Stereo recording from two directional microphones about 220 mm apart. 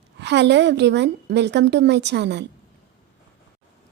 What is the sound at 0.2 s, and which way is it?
A woman's voice, 50° right (ahead or behind).